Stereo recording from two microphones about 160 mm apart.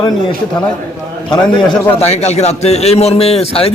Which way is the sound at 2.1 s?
45° left (ahead or behind).